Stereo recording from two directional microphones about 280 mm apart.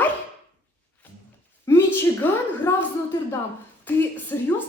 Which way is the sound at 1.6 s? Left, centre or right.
Centre.